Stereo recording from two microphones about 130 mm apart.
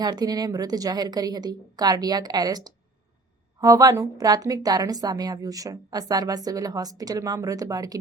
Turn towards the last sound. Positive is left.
turn(degrees=-30)  # may be behind; listen again after turning